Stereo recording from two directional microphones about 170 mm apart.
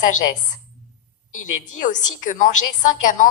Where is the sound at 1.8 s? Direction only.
45° left (ahead or behind).